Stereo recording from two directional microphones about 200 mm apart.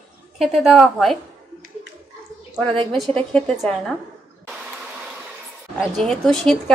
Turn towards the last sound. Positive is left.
turn(degrees=0)  # may be behind; listen again after turning